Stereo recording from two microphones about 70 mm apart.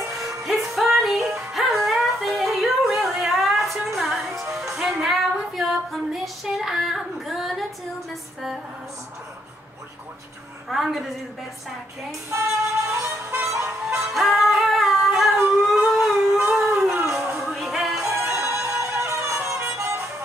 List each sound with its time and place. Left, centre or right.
0.4 s music: centre
5.0 s female singing: centre
8.1 s music: centre
10.7 s a woman's voice: centre
12.3 s music: right
13.8 s music: centre
16.8 s a sound: right
17.4 s music: centre
18.2 s music: right